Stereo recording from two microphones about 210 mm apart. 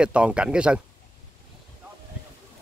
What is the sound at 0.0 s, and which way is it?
Speech, 5° right (ahead or behind).